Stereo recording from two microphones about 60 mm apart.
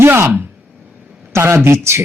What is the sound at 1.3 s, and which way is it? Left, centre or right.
Speech, right.